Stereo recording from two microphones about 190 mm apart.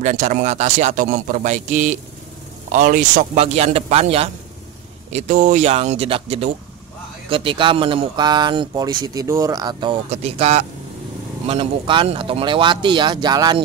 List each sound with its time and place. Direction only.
0.0 s a man's voice: 40° right (ahead or behind); by 13.7 s 20° right (ahead or behind)